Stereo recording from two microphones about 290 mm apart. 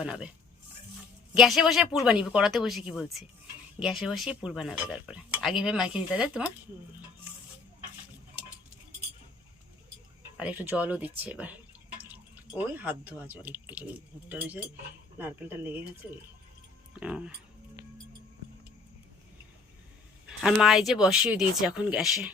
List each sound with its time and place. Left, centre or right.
0.0 s speech: centre
1.3 s speech: centre
10.3 s speech: centre
20.4 s speech: centre